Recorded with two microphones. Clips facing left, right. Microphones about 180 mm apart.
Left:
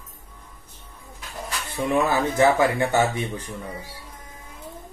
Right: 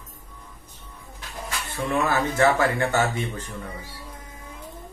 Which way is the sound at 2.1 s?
15° left (ahead or behind).